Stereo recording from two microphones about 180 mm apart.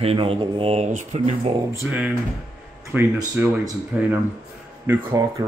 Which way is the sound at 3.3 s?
15° right (ahead or behind).